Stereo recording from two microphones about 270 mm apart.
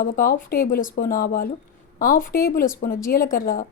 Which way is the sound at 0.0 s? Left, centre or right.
Left.